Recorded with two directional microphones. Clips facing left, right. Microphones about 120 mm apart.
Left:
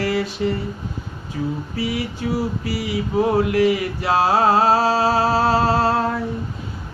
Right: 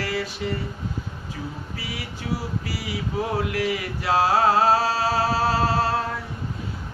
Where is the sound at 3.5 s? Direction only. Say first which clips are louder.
Left 8 dB; 30° left (ahead or behind).